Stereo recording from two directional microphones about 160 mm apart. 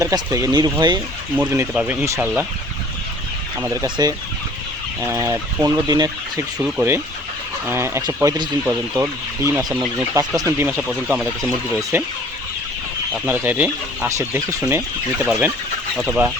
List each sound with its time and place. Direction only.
0.0 s speech: 20° right (ahead or behind)
1.4 s speech: 10° right (ahead or behind)
3.6 s speech: 15° right (ahead or behind)
3.8 s speech: 30° right (ahead or behind)
4.9 s speech: 15° right (ahead or behind)
6.6 s speech: 10° right (ahead or behind)
9.6 s speech: centre (ahead or behind)
10.2 s speech: 20° right (ahead or behind)
10.8 s speech: 5° right (ahead or behind)
11.8 s speech: 20° right (ahead or behind)
13.2 s speech: 10° right (ahead or behind)